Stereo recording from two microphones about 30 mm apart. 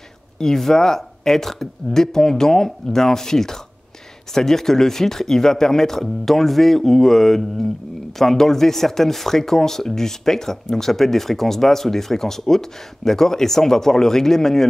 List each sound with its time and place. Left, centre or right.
0.6 s speech: centre